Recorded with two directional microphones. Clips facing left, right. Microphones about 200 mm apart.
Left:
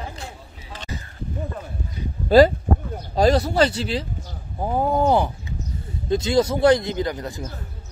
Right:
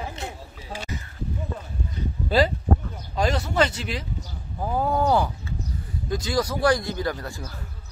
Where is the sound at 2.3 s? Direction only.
45° left (ahead or behind); by 7.5 s 20° left (ahead or behind).